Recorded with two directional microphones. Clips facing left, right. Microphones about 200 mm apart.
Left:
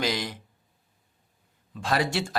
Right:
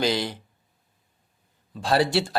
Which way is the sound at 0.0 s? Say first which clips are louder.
Right 4 dB; 30° right (ahead or behind).